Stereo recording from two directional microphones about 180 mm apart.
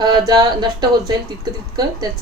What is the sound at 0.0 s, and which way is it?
Speech, 20° right (ahead or behind).